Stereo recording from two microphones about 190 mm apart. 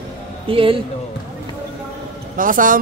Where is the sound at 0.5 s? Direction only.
30° right (ahead or behind).